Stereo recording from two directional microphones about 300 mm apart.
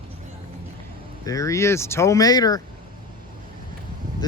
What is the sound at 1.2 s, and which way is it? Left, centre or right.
Speech, centre.